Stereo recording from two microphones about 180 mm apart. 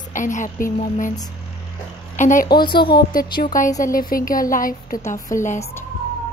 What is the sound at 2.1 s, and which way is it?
Speech, 45° left (ahead or behind).